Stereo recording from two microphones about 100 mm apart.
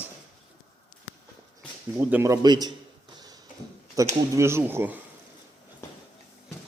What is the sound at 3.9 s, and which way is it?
Speech, 30° right (ahead or behind).